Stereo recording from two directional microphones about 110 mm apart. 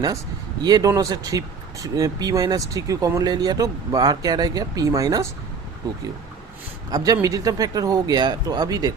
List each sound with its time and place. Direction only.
0.6 s speech: 35° right (ahead or behind)
6.9 s speech: 30° right (ahead or behind)